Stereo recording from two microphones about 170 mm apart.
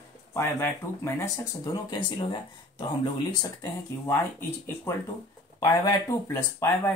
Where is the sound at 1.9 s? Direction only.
25° left (ahead or behind).